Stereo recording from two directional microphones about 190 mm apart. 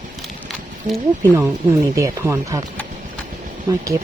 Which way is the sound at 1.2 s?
15° right (ahead or behind).